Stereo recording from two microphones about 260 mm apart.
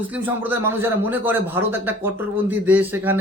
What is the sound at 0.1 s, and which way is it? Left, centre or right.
A man's voice, centre.